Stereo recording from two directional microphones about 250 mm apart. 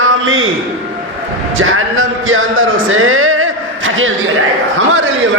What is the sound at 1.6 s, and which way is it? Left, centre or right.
Music, right.